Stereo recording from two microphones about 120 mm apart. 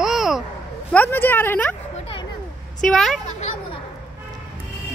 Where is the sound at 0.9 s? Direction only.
15° left (ahead or behind).